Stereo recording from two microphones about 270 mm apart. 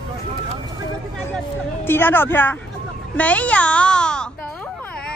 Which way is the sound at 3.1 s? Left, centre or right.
Centre.